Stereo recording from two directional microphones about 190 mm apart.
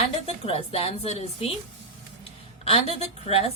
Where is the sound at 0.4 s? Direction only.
30° left (ahead or behind).